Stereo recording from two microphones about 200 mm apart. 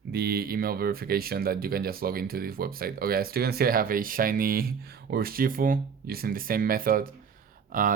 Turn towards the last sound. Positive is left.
turn(degrees=-45)  # may be behind; listen again after turning